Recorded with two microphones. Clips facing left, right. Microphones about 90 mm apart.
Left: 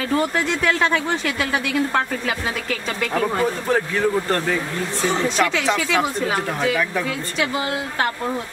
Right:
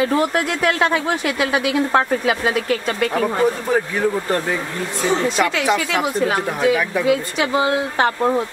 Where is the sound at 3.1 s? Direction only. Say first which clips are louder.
Right 1 dB; 10° right (ahead or behind).